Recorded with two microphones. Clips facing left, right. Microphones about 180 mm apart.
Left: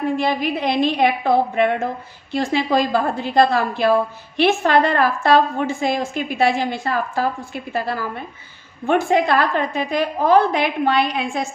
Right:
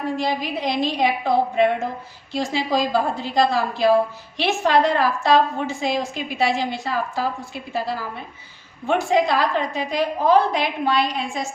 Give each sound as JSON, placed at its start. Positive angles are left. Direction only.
{"t": 0.2, "sound": "a woman's voice", "side_deg": 60}